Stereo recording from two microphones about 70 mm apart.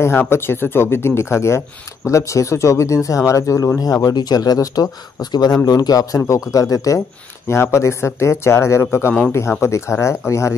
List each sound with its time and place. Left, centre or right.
0.0 s speech: left
7.4 s speech: left